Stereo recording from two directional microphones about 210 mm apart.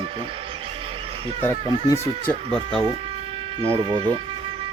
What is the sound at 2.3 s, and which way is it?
Speech, centre (ahead or behind).